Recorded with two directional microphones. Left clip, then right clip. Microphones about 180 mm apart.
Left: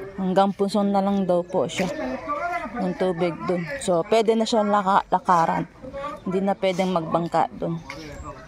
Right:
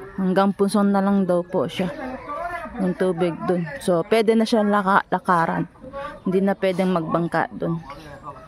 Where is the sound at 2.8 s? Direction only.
35° right (ahead or behind).